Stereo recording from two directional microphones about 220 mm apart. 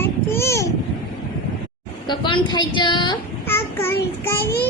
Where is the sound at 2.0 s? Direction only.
20° left (ahead or behind).